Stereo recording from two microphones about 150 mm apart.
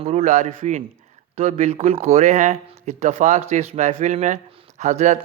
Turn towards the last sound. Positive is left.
turn(degrees=-50)  # may be behind; listen again after turning